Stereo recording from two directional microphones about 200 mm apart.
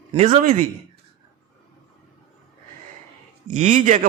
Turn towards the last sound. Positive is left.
turn(degrees=-40)  # may be behind; listen again after turning